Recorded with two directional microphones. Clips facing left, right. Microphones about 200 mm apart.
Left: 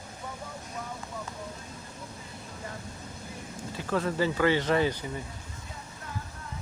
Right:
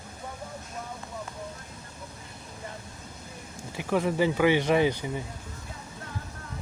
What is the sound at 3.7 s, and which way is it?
Speech, 15° right (ahead or behind).